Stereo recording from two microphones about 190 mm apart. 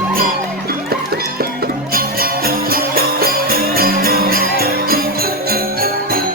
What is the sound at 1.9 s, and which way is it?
Music, 50° right (ahead or behind).